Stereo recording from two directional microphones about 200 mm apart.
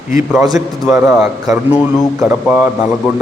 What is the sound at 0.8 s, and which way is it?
A man's voice, 5° right (ahead or behind).